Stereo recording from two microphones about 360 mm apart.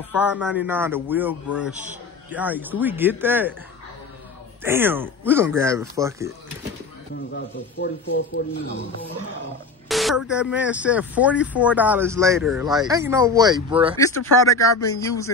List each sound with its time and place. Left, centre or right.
0.2 s speech: centre
4.6 s speech: centre
7.3 s speech: left
9.8 s a sound: centre
10.3 s speech: centre
13.9 s speech: centre